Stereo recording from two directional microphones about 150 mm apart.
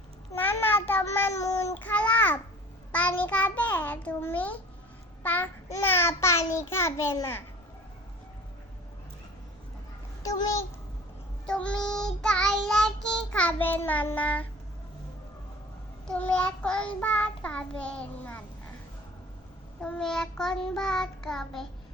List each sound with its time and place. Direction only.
0.3 s child singing: 15° left (ahead or behind)
11.4 s child singing: 5° left (ahead or behind)
16.0 s child singing: 10° left (ahead or behind)
19.8 s child singing: 5° left (ahead or behind)